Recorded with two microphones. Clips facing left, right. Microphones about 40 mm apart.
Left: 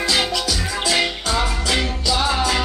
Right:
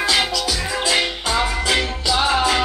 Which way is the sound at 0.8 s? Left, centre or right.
Centre.